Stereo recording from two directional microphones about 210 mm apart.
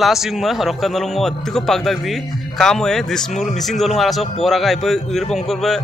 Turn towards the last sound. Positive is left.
turn(degrees=0)  # may be behind; listen again after turning